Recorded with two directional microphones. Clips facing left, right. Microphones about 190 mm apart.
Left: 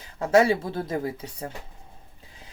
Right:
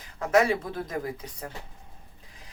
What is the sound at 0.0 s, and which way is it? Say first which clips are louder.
Speech: left 3 dB; 30° left (ahead or behind).